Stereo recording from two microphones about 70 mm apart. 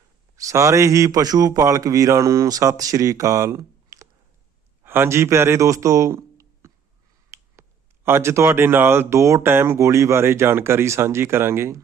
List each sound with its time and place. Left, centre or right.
0.3 s a man's voice: right
4.8 s speech: right
7.3 s finger snapping: right
8.0 s speech: right